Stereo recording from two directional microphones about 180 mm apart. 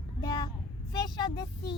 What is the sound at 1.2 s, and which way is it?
Child singing, 25° left (ahead or behind).